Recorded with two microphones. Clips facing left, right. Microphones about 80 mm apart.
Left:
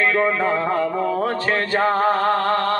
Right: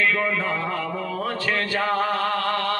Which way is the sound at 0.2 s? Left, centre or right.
Left.